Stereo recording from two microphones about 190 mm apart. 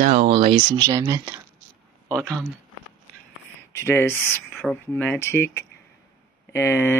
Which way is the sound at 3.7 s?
15° left (ahead or behind).